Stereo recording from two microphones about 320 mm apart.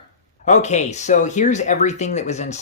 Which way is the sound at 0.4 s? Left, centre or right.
Left.